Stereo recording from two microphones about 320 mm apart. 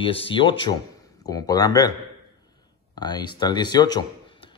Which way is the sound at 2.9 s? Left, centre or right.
Centre.